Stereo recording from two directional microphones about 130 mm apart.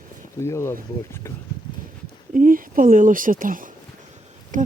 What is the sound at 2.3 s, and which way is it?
Speech, 90° right.